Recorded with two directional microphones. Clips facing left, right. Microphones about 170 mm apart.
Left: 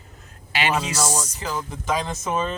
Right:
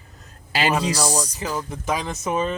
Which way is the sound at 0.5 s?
35° right (ahead or behind).